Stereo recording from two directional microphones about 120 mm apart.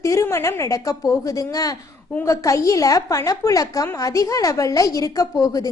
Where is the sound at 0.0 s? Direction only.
25° left (ahead or behind).